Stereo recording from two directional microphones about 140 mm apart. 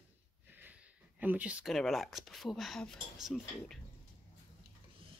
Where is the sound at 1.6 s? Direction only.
Centre (ahead or behind).